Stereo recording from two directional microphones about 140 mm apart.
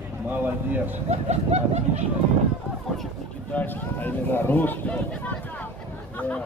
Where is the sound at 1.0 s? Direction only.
50° right (ahead or behind).